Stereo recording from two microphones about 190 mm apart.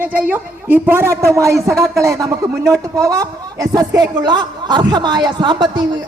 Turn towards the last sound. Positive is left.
turn(degrees=-20)  # may be behind; listen again after turning